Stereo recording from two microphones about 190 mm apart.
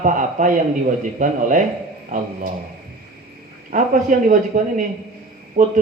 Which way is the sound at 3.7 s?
45° right (ahead or behind).